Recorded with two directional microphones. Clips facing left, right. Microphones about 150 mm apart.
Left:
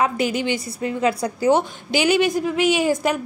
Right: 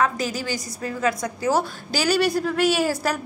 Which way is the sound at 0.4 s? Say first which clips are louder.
Left 5 dB; 25° left (ahead or behind).